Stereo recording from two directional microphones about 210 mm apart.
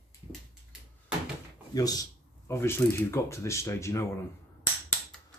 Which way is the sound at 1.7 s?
15° left (ahead or behind).